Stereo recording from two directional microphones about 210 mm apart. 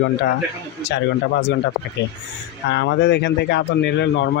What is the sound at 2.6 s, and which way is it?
Speech, 55° left (ahead or behind).